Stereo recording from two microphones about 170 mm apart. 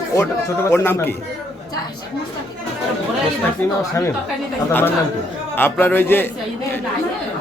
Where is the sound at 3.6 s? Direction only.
10° left (ahead or behind).